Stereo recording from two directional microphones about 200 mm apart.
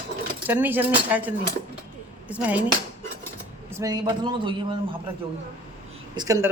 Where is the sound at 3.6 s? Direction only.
15° right (ahead or behind).